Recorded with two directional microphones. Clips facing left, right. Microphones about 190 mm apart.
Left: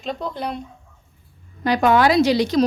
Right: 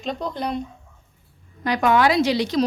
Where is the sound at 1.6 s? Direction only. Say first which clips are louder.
Left 2 dB; 30° left (ahead or behind).